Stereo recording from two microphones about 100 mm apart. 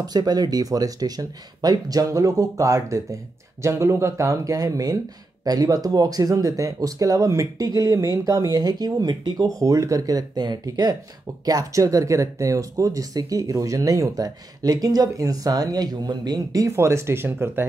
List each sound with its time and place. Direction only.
0.0 s speech: 40° right (ahead or behind); by 17.6 s 20° right (ahead or behind)